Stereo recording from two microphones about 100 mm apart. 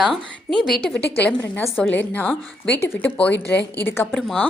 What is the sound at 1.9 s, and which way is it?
A woman's voice, 15° left (ahead or behind).